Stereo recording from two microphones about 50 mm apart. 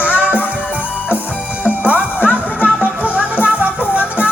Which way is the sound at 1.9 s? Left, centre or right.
Right.